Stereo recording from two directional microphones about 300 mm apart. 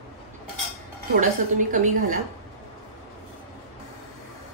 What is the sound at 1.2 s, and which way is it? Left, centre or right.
Speech, right.